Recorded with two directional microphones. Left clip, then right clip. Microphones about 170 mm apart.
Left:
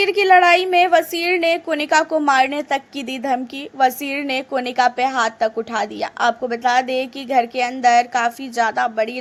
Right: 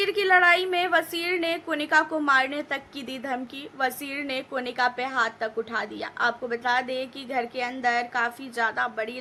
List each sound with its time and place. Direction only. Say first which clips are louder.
0.0 s a woman's voice: left 7 dB; 30° left (ahead or behind)